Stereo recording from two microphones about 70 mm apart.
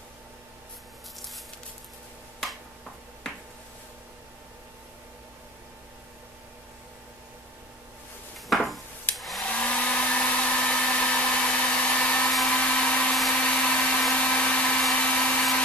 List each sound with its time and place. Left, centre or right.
8.5 s a sound: centre
9.1 s hair dryer: centre
9.5 s hair dryer: centre
13.3 s blender: centre
14.1 s a sound: centre
15.0 s hair dryer: centre